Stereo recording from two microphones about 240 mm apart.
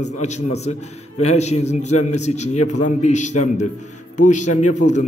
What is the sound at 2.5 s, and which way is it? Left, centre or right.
Speech, left.